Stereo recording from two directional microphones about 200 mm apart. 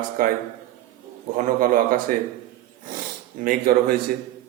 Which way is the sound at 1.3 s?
40° right (ahead or behind).